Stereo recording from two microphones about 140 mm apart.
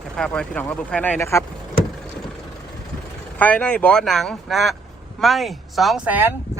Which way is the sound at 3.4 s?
10° left (ahead or behind).